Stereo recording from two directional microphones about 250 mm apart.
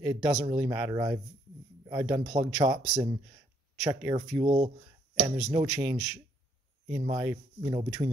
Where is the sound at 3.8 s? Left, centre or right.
Centre.